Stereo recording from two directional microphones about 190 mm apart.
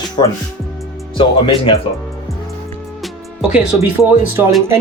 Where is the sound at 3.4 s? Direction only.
5° right (ahead or behind).